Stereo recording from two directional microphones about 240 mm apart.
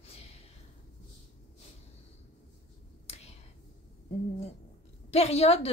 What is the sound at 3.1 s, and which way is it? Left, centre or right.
Finger snapping, left.